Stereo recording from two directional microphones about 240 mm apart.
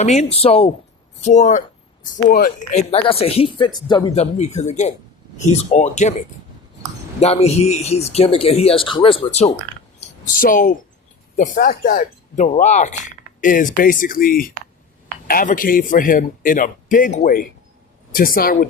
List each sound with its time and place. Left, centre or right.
0.0 s a man's voice: left
2.9 s a man's voice: left
10.4 s a man's voice: left